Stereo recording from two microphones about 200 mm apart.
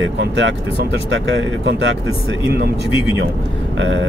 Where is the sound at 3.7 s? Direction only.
65° right (ahead or behind).